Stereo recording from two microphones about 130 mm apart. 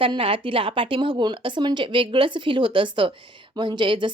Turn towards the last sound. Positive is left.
turn(degrees=-40)  # may be behind; listen again after turning